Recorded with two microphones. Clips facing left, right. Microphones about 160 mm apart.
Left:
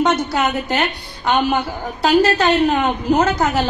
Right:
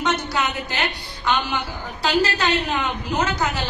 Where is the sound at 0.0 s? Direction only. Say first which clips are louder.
Left 6 dB; 50° left (ahead or behind).